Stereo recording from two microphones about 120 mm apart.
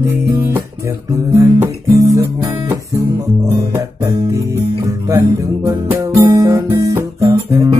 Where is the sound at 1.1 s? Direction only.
20° right (ahead or behind).